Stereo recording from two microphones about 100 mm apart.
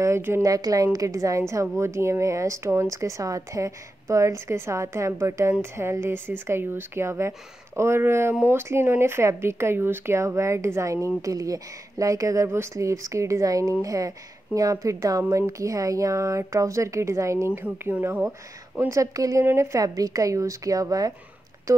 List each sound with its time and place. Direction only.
0.0 s a woman's voice: 25° right (ahead or behind)
18.9 s a woman's voice: 35° right (ahead or behind)